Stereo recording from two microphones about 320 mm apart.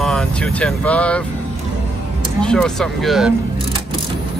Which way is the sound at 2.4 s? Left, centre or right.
Centre.